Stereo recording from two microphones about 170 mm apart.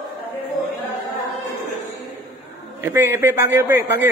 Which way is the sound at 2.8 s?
15° right (ahead or behind).